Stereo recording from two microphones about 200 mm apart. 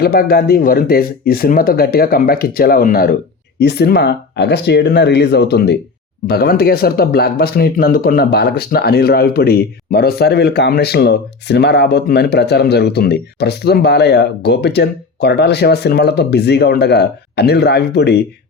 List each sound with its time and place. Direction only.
0.0 s speech: 50° left (ahead or behind)